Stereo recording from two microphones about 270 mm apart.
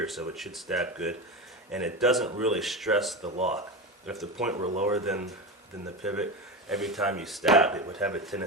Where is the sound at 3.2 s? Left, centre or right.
Right.